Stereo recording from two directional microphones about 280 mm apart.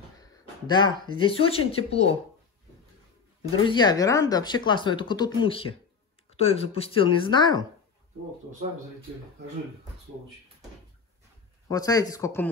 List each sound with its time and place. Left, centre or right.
0.2 s speech: centre
3.6 s speech: centre
11.7 s speech: centre